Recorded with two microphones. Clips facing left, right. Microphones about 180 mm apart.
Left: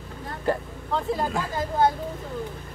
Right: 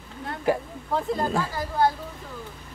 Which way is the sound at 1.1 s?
20° left (ahead or behind).